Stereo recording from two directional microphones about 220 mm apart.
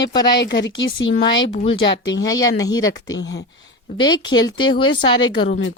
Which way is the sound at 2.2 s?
15° left (ahead or behind).